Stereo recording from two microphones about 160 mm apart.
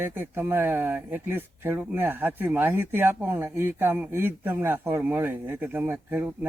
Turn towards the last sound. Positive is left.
turn(degrees=-10)  # may be behind; listen again after turning